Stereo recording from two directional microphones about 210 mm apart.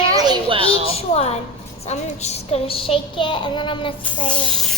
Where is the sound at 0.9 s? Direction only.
30° left (ahead or behind).